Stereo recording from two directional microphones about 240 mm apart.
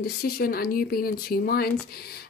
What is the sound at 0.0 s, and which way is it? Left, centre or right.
Speech, left.